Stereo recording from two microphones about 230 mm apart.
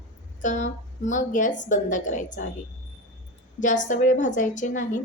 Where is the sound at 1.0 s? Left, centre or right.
Left.